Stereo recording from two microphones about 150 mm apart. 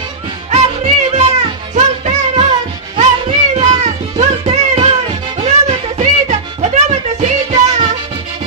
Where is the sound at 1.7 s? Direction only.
45° right (ahead or behind).